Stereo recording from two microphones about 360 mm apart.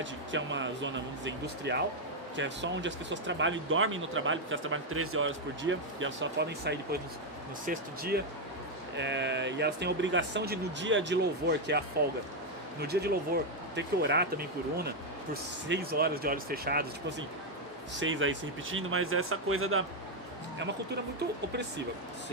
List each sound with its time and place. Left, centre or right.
0.0 s speech: right